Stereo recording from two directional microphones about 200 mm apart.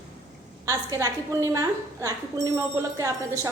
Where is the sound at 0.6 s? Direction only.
15° right (ahead or behind).